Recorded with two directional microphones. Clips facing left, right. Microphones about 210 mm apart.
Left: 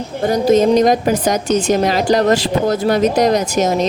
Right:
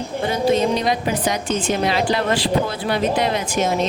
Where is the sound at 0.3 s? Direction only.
40° left (ahead or behind).